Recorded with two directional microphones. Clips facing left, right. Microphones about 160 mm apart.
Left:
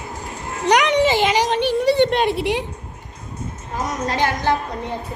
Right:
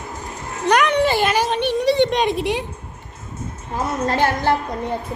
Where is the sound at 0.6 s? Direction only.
15° left (ahead or behind).